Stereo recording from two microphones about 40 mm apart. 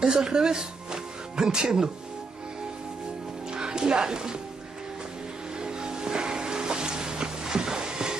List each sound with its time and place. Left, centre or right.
0.0 s speech: centre
3.5 s speech: centre
5.6 s music: centre